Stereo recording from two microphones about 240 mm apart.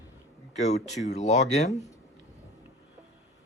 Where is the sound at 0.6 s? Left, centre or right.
Left.